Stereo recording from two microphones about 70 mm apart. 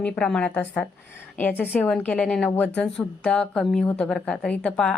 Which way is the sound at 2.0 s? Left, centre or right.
Centre.